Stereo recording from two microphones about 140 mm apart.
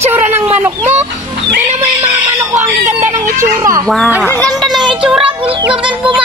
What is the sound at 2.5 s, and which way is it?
Music, 20° right (ahead or behind).